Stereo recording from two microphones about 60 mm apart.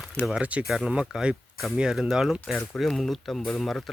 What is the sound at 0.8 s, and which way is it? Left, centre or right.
Speech, centre.